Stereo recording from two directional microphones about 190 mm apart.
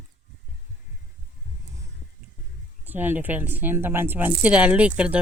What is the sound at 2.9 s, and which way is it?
Speech, 10° right (ahead or behind).